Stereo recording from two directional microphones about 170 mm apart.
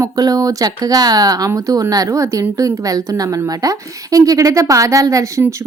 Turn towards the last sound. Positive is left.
turn(degrees=-15)  # may be behind; listen again after turning